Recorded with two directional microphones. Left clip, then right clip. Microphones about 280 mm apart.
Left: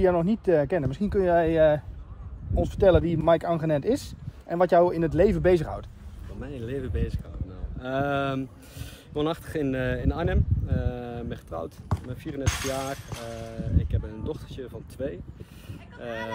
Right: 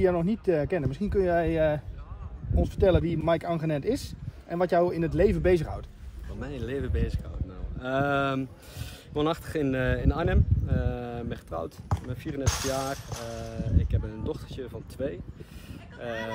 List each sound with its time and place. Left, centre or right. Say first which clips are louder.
0.0 s speech: left 2 dB; centre
6.4 s speech: even; centre
12.4 s speech: even; centre
13.4 s speech: even; centre
15.7 s a sound: even; centre